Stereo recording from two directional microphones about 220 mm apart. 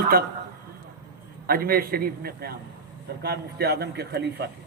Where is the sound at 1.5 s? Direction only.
40° right (ahead or behind).